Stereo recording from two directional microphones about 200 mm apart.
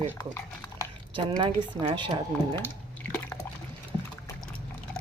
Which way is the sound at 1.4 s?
25° right (ahead or behind).